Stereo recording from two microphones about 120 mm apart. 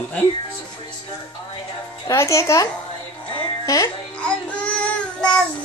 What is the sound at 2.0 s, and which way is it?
A woman's voice, 25° left (ahead or behind).